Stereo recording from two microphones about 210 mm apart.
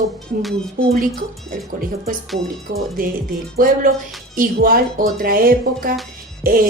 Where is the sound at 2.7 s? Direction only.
40° right (ahead or behind).